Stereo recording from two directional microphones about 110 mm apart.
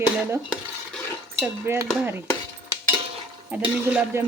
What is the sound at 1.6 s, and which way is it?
Speech, 20° right (ahead or behind).